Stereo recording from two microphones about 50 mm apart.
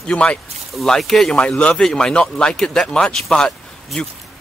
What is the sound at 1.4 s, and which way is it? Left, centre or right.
Speech, left.